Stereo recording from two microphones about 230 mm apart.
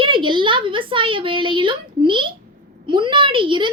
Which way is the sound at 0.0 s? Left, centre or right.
Right.